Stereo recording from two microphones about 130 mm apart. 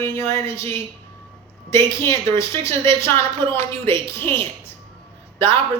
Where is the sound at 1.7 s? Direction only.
20° left (ahead or behind).